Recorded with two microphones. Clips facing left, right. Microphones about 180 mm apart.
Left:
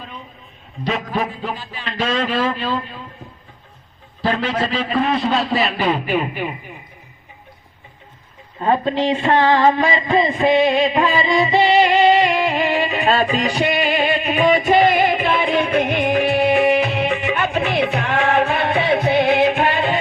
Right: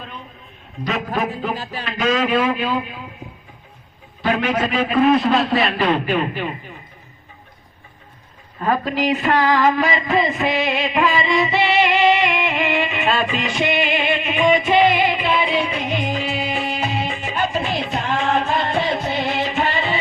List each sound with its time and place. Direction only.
0.9 s a man's voice: centre (ahead or behind)
4.4 s a man's voice: 10° right (ahead or behind); by 6.7 s 10° left (ahead or behind)
8.5 s a sound: 25° left (ahead or behind); by 20.0 s 55° left (ahead or behind)